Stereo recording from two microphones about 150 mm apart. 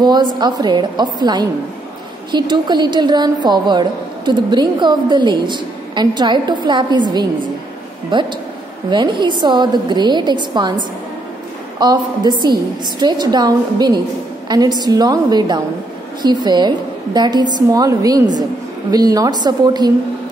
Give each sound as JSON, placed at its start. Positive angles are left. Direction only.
{"t": 0.0, "sound": "a woman's voice", "side_deg": -30}
{"t": 11.8, "sound": "a woman's voice", "side_deg": -30}